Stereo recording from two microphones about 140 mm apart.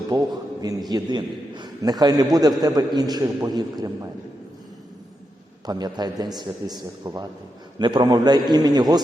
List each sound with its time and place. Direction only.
0.1 s a sound: 30° right (ahead or behind)
0.9 s a man's voice: 30° right (ahead or behind)
5.6 s a man's voice: 30° right (ahead or behind)